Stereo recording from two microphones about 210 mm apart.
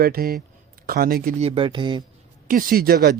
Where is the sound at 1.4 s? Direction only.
25° right (ahead or behind).